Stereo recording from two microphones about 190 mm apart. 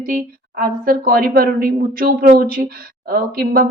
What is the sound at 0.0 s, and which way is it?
A woman's voice, 50° right (ahead or behind).